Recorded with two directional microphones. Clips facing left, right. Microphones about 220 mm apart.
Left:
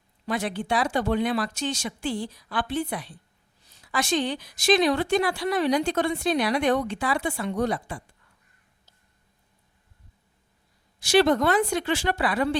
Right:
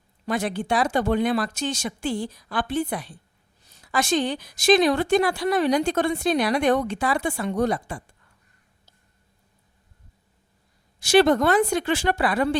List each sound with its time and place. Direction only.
0.3 s a woman's voice: 45° right (ahead or behind)
11.1 s a woman's voice: 50° right (ahead or behind)